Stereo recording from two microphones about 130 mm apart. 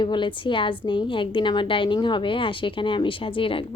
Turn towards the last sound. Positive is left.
turn(degrees=40)  # may be behind; listen again after turning